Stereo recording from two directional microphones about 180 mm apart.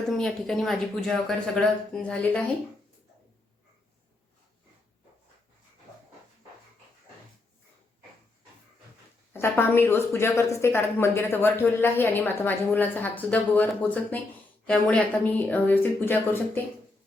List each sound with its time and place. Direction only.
0.2 s speech: 5° left (ahead or behind)
9.3 s a woman's voice: 10° left (ahead or behind)